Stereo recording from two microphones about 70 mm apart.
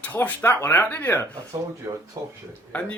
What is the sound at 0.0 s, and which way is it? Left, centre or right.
Speech, left.